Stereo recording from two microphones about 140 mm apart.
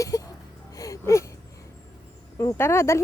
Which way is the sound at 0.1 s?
20° left (ahead or behind).